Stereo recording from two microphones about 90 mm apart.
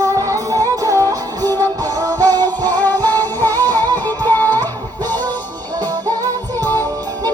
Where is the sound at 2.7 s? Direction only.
20° left (ahead or behind).